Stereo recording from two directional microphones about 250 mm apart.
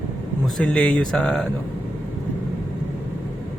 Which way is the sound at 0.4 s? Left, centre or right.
Centre.